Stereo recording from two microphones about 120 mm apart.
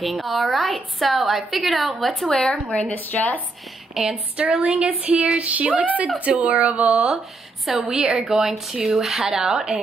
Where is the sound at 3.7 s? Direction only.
5° right (ahead or behind).